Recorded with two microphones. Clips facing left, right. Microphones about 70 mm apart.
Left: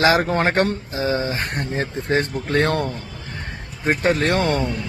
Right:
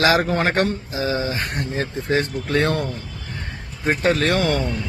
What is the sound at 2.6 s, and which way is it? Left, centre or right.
Speech, left.